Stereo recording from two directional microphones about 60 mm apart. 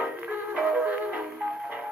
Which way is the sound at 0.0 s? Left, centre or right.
Right.